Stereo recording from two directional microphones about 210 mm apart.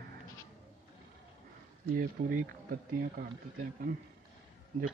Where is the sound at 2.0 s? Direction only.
40° right (ahead or behind).